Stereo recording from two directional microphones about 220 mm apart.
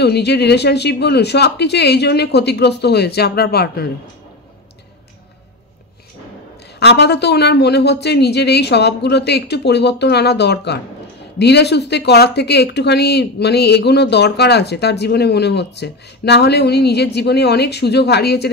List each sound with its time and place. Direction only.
0.0 s speech: 50° left (ahead or behind)
6.8 s speech: 50° left (ahead or behind)